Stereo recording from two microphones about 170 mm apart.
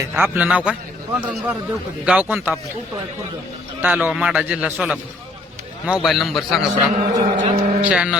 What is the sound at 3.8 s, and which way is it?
A man's voice, 10° right (ahead or behind).